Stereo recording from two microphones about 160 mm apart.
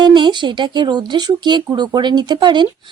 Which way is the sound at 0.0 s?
30° right (ahead or behind).